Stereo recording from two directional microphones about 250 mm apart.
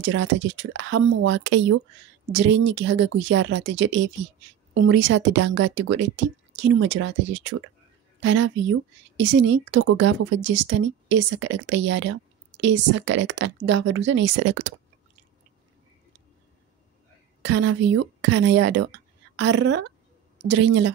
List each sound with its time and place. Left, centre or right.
0.0 s a woman's voice: right
17.4 s a woman's voice: right